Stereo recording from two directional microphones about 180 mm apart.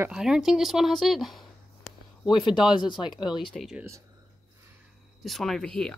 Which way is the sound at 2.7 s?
25° left (ahead or behind).